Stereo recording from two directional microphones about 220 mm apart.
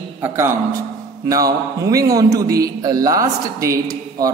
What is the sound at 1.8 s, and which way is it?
A man's voice, 15° right (ahead or behind).